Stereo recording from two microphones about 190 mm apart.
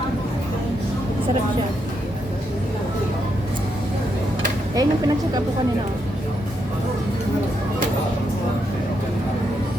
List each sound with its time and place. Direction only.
4.7 s speech: 20° right (ahead or behind)